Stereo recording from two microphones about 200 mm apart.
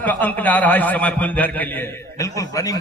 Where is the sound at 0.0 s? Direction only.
10° left (ahead or behind).